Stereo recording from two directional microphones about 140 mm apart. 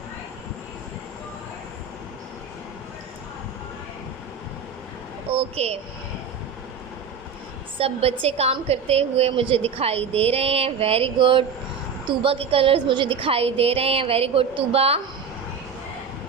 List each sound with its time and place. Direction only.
5.3 s speech: 45° right (ahead or behind)
7.8 s a woman's voice: 45° right (ahead or behind)